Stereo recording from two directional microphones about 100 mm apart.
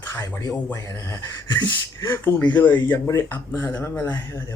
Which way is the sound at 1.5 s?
50° left (ahead or behind).